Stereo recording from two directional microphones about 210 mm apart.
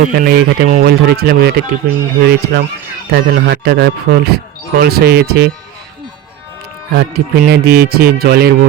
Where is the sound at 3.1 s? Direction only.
55° right (ahead or behind).